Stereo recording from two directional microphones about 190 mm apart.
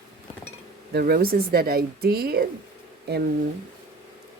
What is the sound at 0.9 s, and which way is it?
Speech, 55° right (ahead or behind).